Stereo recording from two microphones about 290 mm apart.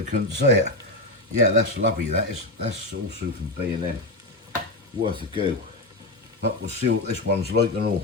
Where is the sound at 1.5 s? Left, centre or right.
Right.